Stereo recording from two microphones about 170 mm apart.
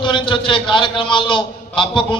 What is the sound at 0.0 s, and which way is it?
A man's voice, 30° left (ahead or behind).